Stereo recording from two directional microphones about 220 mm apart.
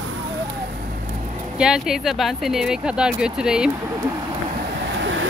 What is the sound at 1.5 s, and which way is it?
Speech, centre (ahead or behind).